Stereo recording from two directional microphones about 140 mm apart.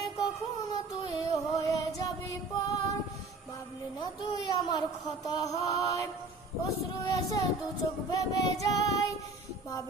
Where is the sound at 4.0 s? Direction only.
30° left (ahead or behind).